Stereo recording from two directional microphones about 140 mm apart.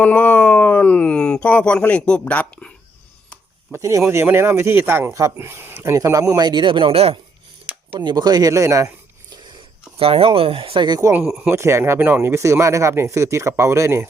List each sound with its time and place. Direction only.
0.0 s speech: 10° left (ahead or behind)
3.7 s speech: 20° right (ahead or behind); by 7.2 s 40° right (ahead or behind)
7.9 s speech: 30° right (ahead or behind)
10.0 s speech: 40° right (ahead or behind)
11.2 s speech: 5° right (ahead or behind)
11.4 s speech: 20° right (ahead or behind)